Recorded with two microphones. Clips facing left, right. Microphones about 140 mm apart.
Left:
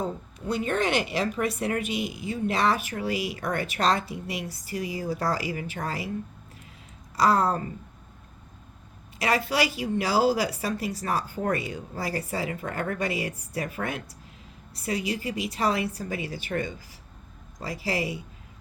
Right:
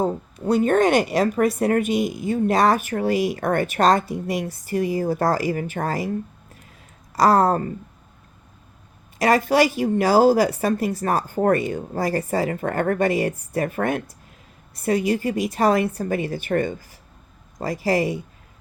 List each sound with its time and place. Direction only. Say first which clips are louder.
0.0 s a woman's voice: right 8 dB; 45° right (ahead or behind)
7.2 s a woman's voice: right 6 dB; 45° right (ahead or behind)
9.1 s a woman's voice: right 8 dB; 45° right (ahead or behind)